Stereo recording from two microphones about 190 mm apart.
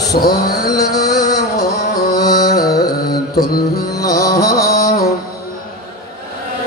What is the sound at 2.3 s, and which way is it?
Carnatic music, 55° left (ahead or behind).